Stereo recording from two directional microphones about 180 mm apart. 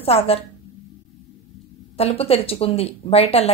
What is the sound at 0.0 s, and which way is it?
Speech, 35° left (ahead or behind).